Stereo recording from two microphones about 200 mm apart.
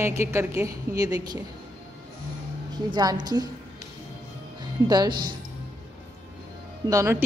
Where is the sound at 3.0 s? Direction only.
20° right (ahead or behind).